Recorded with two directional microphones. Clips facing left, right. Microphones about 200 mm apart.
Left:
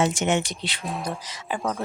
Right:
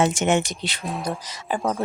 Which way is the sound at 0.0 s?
50° right (ahead or behind).